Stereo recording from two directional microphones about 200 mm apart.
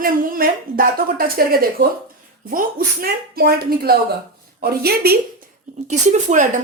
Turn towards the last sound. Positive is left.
turn(degrees=-40)  # may be behind; listen again after turning